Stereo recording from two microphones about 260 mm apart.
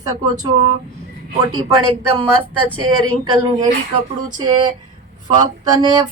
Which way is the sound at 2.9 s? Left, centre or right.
Right.